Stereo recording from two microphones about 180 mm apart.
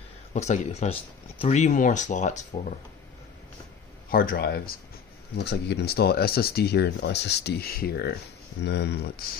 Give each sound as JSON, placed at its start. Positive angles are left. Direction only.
{"t": 0.3, "sound": "speech", "side_deg": 40}
{"t": 4.1, "sound": "speech", "side_deg": 55}
{"t": 8.5, "sound": "speech", "side_deg": 70}